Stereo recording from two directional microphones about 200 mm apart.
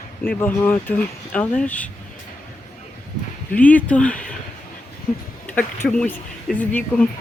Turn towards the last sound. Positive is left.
turn(degrees=5)  # may be behind; listen again after turning